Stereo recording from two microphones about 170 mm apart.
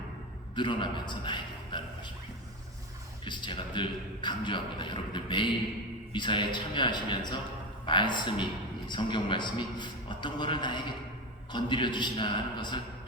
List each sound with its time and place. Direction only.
0.5 s a man's voice: 30° left (ahead or behind)
3.2 s a man's voice: 25° left (ahead or behind)